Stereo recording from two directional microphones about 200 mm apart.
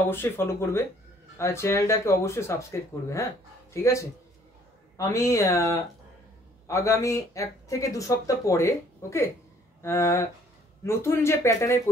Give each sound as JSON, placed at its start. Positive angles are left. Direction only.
{"t": 0.1, "sound": "speech", "side_deg": 10}